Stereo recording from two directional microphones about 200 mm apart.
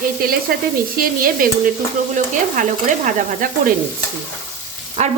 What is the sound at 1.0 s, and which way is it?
Sizzle, 45° right (ahead or behind).